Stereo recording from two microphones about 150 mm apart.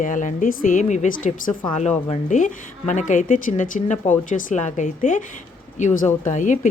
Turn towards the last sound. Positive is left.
turn(degrees=55)  # may be behind; listen again after turning